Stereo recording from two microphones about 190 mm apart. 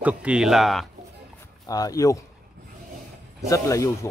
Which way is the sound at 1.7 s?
20° left (ahead or behind).